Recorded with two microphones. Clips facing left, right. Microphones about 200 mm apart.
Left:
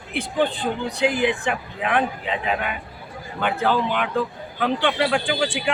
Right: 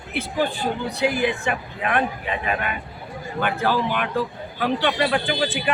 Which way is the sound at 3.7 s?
20° left (ahead or behind).